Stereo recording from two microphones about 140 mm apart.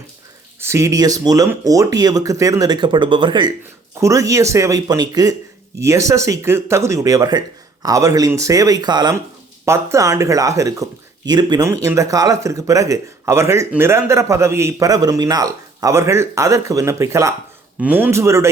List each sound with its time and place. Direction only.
0.6 s speech: 20° right (ahead or behind)
4.0 s speech: 25° right (ahead or behind)